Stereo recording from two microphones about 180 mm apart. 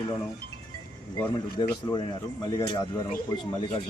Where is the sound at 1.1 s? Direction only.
20° left (ahead or behind).